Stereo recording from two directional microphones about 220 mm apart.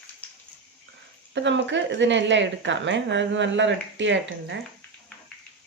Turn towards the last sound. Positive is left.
turn(degrees=-55)  # may be behind; listen again after turning